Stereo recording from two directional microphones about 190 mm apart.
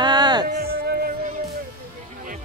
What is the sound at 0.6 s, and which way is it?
Music, 55° right (ahead or behind).